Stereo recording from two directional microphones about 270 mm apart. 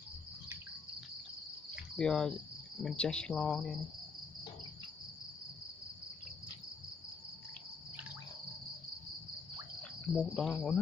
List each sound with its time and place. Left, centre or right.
2.0 s cricket: centre
9.8 s insect: centre